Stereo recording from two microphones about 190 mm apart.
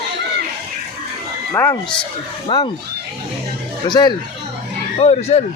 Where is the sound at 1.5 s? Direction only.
15° left (ahead or behind).